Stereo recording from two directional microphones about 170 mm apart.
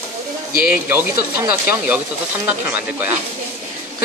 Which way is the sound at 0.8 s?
10° right (ahead or behind).